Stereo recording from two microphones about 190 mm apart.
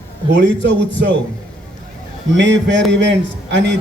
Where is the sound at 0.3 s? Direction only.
65° right (ahead or behind).